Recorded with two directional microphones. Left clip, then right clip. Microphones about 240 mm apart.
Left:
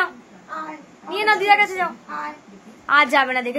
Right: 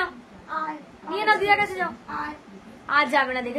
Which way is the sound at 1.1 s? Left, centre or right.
Centre.